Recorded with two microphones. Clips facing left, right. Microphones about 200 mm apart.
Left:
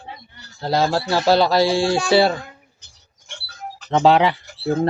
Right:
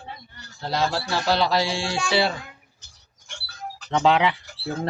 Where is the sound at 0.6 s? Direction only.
35° left (ahead or behind).